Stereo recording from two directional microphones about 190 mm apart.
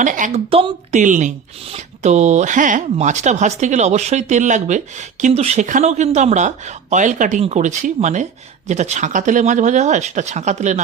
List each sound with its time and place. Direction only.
0.0 s speech: 40° right (ahead or behind)